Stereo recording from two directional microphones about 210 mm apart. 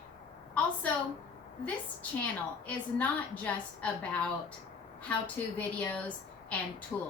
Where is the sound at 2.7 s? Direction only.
5° left (ahead or behind).